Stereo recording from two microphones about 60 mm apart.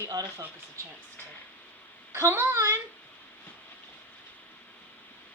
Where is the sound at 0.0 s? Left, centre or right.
Right.